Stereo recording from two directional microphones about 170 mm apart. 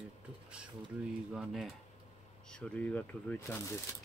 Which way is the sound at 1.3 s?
Centre (ahead or behind).